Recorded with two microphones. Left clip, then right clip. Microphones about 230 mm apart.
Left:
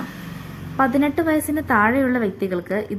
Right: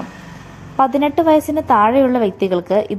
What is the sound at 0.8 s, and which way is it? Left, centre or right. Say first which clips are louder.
A woman's voice: right 5 dB; centre.